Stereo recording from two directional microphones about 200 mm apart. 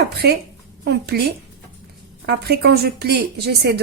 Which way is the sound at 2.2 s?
55° right (ahead or behind).